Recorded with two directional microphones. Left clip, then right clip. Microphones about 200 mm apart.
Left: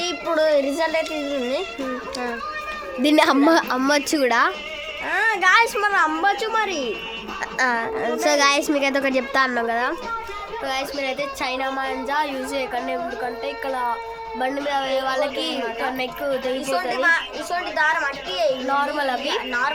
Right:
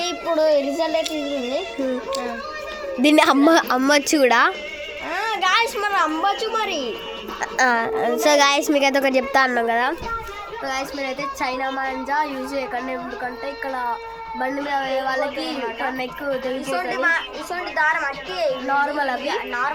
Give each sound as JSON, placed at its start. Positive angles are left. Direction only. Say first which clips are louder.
{"t": 0.0, "sound": "child singing", "louder": "right 1 dB", "side_deg": 25}
{"t": 3.0, "sound": "a woman's voice", "louder": "right 2 dB", "side_deg": -15}
{"t": 5.1, "sound": "a woman's voice", "louder": "left 3 dB", "side_deg": 25}
{"t": 7.5, "sound": "a woman's voice", "louder": "right 3 dB", "side_deg": -15}
{"t": 14.3, "sound": "speech", "louder": "even", "side_deg": -5}
{"t": 17.0, "sound": "a woman's voice", "louder": "left 1 dB", "side_deg": 10}
{"t": 18.7, "sound": "a woman's voice", "louder": "right 1 dB", "side_deg": -10}
{"t": 19.3, "sound": "a woman's voice", "louder": "left 1 dB", "side_deg": 10}